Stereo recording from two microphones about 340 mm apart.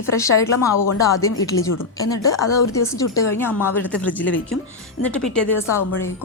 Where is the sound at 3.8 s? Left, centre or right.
Centre.